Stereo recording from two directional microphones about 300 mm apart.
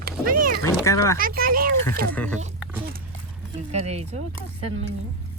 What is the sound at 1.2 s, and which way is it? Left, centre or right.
Speech, right.